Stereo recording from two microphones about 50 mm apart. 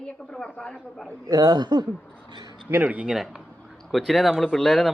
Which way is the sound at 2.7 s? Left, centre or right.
Right.